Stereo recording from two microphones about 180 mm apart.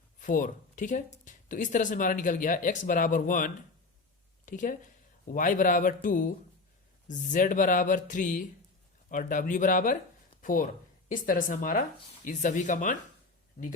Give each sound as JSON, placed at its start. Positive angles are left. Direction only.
{"t": 0.2, "sound": "speech", "side_deg": 45}
{"t": 13.6, "sound": "speech", "side_deg": 55}